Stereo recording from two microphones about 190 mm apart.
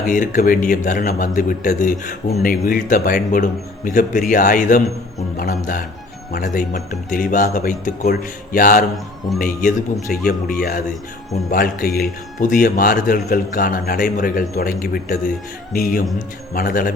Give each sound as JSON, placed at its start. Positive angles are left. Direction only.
{"t": 0.1, "sound": "a man's voice", "side_deg": 45}